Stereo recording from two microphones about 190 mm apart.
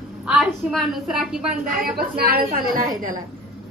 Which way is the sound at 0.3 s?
Centre (ahead or behind).